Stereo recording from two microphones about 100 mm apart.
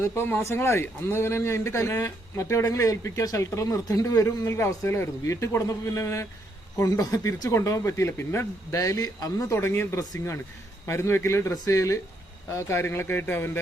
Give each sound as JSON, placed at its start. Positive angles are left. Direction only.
{"t": 0.0, "sound": "speech", "side_deg": 25}